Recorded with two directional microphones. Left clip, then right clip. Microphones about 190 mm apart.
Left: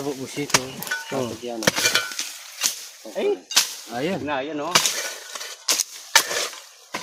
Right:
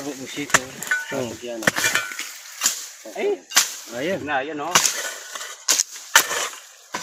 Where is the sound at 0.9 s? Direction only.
40° left (ahead or behind).